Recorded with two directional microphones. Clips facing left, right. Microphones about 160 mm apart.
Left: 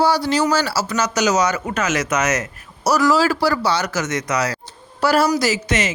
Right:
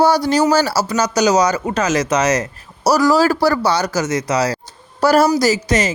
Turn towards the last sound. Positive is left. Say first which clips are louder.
# right 4 dB
turn(degrees=-35)  # may be behind; listen again after turning